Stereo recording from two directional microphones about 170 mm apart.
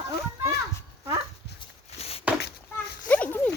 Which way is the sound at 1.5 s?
35° left (ahead or behind).